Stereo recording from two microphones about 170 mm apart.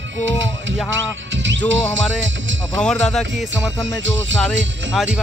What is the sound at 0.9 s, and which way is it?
Music, 90° right.